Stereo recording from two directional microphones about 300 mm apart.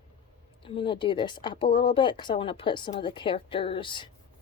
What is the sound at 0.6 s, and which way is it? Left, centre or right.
Speech, centre.